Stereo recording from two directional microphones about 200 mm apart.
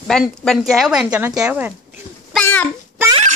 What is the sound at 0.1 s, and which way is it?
Speech, centre (ahead or behind).